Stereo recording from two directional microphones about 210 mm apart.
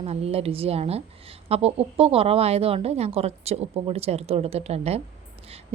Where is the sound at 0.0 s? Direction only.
30° right (ahead or behind).